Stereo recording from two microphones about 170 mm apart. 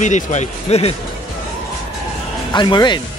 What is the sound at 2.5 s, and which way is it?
Speech, 25° left (ahead or behind).